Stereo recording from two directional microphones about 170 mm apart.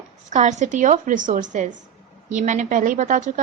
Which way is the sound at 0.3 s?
45° right (ahead or behind).